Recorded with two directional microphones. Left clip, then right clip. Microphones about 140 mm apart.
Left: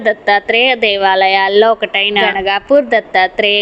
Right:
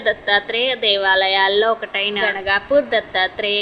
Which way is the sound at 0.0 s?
50° left (ahead or behind).